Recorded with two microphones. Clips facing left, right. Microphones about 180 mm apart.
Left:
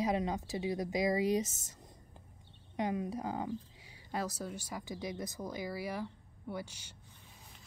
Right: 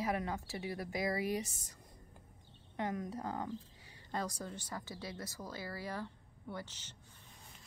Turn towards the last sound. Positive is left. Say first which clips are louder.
# left 4 dB
turn(degrees=10)  # may be behind; listen again after turning